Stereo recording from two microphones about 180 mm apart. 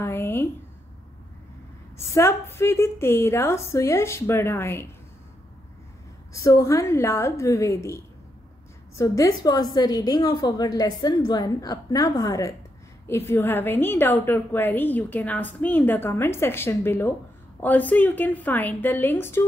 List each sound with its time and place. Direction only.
0.0 s a sound: 10° left (ahead or behind)
2.0 s a woman's voice: 15° left (ahead or behind)
6.4 s a woman's voice: 15° left (ahead or behind)